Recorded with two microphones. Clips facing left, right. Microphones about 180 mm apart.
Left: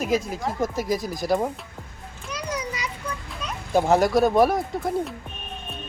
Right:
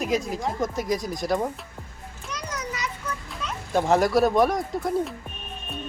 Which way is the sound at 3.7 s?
Centre (ahead or behind).